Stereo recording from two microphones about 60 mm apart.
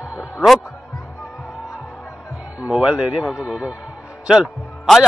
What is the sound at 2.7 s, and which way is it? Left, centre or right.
A man's voice, centre.